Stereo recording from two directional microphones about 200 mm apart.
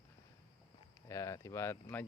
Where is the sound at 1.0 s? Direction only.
15° left (ahead or behind).